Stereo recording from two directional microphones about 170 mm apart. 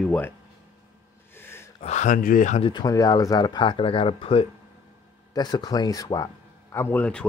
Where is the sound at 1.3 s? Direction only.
15° left (ahead or behind).